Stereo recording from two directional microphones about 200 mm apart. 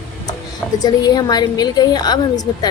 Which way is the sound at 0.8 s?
20° left (ahead or behind).